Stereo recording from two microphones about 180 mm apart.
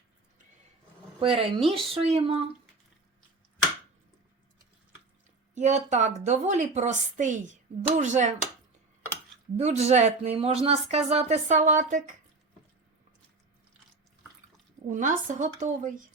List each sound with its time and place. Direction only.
1.2 s a woman's voice: 30° right (ahead or behind)
5.5 s a woman's voice: 40° right (ahead or behind)
9.6 s a woman's voice: 35° right (ahead or behind)
14.8 s a woman's voice: 45° right (ahead or behind)